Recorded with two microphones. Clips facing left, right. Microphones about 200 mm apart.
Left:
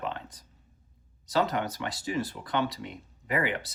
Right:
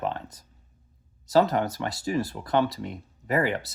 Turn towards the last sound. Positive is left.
turn(degrees=-40)  # may be behind; listen again after turning